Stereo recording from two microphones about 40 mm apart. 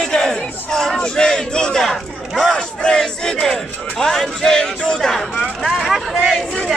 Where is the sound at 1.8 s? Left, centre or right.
Centre.